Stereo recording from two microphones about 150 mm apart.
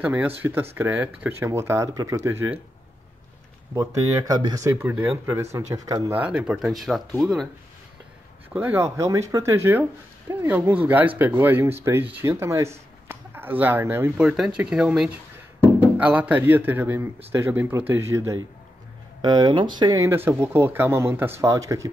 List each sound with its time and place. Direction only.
0.0 s speech: 10° right (ahead or behind)
3.7 s speech: 20° right (ahead or behind)
6.1 s speech: 10° right (ahead or behind)
8.5 s speech: 15° right (ahead or behind)
20.2 s speech: 15° right (ahead or behind)